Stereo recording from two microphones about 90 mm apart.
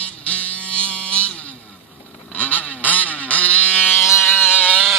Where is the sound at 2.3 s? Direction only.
20° left (ahead or behind).